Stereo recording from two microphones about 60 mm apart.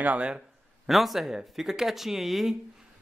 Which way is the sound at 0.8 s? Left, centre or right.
Centre.